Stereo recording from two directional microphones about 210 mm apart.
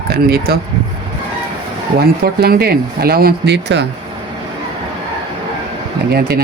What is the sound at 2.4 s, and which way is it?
Speech, 50° right (ahead or behind).